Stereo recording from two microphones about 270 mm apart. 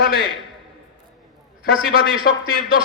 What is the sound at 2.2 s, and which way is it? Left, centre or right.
Speech, left.